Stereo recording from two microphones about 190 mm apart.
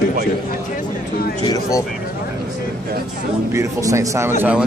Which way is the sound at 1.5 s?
15° left (ahead or behind).